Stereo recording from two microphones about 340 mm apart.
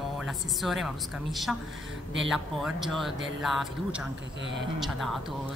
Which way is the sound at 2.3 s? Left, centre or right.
Centre.